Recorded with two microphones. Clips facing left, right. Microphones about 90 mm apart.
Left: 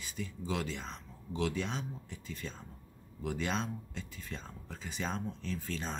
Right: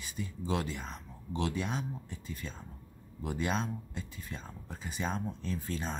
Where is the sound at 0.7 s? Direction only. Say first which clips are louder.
Right 1 dB; 10° right (ahead or behind).